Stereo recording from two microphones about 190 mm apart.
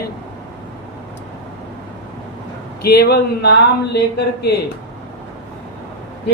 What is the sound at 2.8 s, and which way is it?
Speech, 55° left (ahead or behind).